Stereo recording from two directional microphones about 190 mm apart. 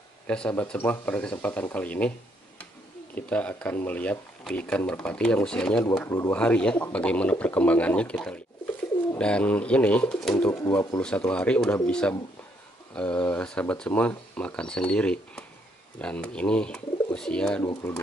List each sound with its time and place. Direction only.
0.3 s speech: 5° left (ahead or behind)
3.2 s speech: 5° left (ahead or behind)
10.6 s speech: 20° left (ahead or behind)
11.0 s speech: 5° left (ahead or behind)